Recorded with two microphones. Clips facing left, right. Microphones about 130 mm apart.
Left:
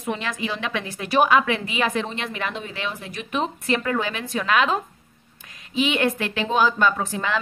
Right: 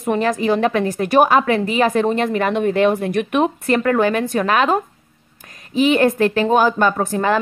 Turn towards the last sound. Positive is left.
turn(degrees=-50)  # may be behind; listen again after turning